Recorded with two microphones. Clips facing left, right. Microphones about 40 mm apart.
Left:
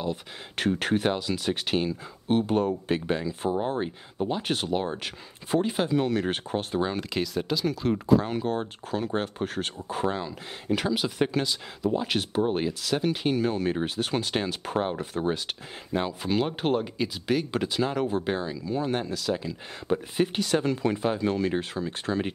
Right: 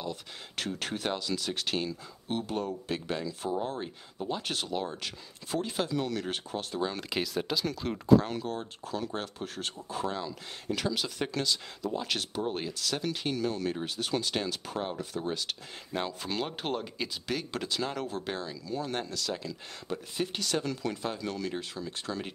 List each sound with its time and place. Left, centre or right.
0.0 s speech: left
7.0 s speech: centre
8.4 s speech: left
15.9 s speech: centre
19.9 s speech: left